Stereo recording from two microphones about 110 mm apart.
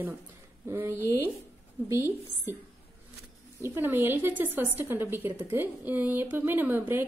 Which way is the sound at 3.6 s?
20° right (ahead or behind).